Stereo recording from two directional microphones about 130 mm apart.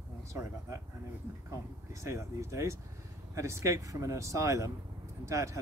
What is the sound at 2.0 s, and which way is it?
Speech, 25° right (ahead or behind).